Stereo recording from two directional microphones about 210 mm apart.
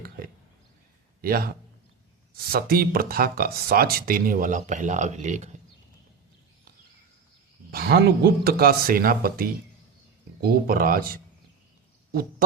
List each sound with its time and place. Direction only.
1.2 s a man's voice: 45° right (ahead or behind)
7.7 s speech: 45° right (ahead or behind)